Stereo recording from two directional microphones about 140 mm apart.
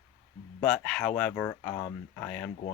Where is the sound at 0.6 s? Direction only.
5° left (ahead or behind).